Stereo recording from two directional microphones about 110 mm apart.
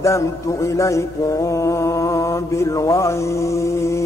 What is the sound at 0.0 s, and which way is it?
Mantra, 25° left (ahead or behind).